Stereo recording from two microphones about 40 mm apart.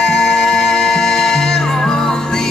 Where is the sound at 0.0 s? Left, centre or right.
Centre.